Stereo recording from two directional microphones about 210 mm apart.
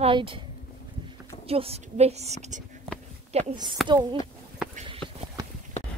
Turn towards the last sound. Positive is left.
turn(degrees=-20)  # may be behind; listen again after turning